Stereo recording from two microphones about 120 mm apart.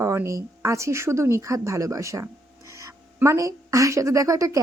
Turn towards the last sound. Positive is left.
turn(degrees=-25)  # may be behind; listen again after turning